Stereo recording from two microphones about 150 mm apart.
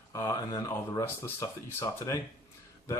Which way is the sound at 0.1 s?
20° left (ahead or behind).